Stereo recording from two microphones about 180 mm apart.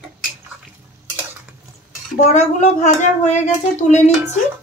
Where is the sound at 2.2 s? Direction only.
40° left (ahead or behind).